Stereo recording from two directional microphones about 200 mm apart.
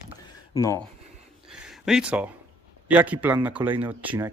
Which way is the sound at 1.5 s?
5° right (ahead or behind).